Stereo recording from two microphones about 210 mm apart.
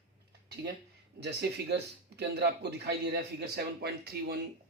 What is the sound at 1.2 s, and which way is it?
Speech, 50° right (ahead or behind).